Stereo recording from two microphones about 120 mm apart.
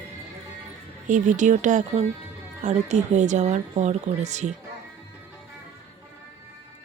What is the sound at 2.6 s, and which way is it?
Speech, 75° right (ahead or behind).